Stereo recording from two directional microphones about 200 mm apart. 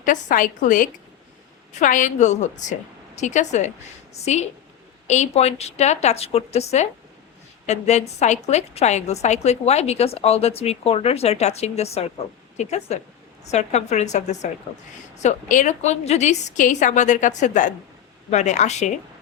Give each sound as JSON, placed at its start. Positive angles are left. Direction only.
{"t": 0.0, "sound": "a woman's voice", "side_deg": 40}